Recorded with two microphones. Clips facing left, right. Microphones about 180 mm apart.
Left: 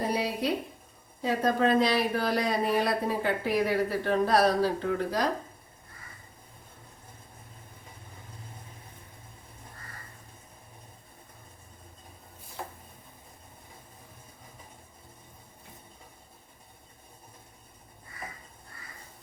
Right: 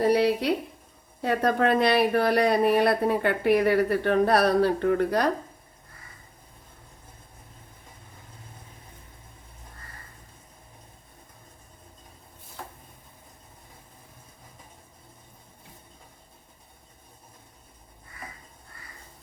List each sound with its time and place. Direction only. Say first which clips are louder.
0.1 s speech: right 7 dB; 70° right (ahead or behind)